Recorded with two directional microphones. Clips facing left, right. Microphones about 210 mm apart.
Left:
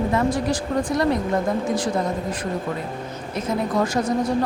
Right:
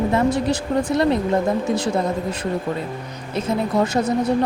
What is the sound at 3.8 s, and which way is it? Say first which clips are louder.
Speech: right 2 dB; 20° right (ahead or behind).